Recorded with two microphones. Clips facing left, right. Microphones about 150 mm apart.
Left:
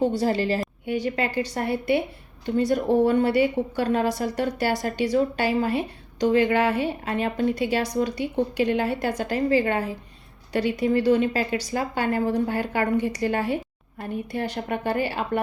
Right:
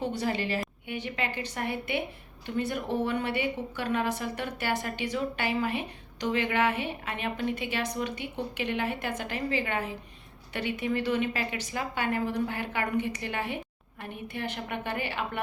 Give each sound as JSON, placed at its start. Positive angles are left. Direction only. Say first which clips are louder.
{"t": 0.0, "sound": "a woman's voice", "louder": "left 8 dB", "side_deg": 35}